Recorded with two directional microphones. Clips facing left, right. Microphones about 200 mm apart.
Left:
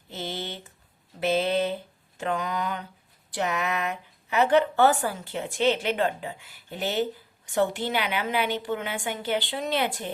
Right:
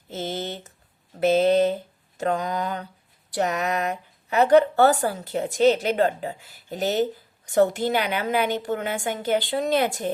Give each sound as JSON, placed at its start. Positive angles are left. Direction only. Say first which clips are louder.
{"t": 0.1, "sound": "speech", "louder": "right 4 dB", "side_deg": -45}